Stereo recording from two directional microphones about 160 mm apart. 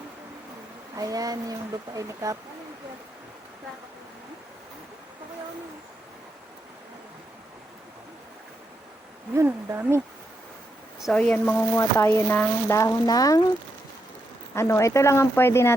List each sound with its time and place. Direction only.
0.9 s speech: 20° right (ahead or behind)
9.3 s speech: 15° right (ahead or behind)
11.0 s speech: 5° left (ahead or behind); by 13.4 s 20° left (ahead or behind)
14.5 s speech: 15° left (ahead or behind)